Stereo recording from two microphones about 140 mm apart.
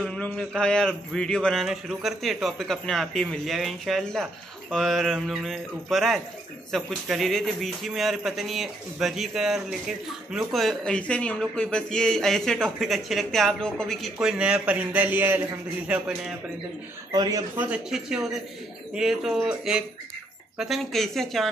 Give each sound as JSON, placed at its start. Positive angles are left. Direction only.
{"t": 0.0, "sound": "a man's voice", "side_deg": 5}
{"t": 17.1, "sound": "a man's voice", "side_deg": -30}
{"t": 17.6, "sound": "a man's voice", "side_deg": -5}